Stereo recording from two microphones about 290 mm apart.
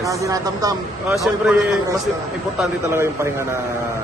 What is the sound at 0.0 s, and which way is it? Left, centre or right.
Speech, centre.